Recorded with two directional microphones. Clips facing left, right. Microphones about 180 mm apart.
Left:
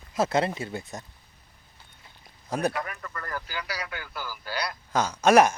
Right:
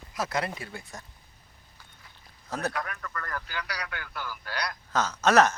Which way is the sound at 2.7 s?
5° left (ahead or behind).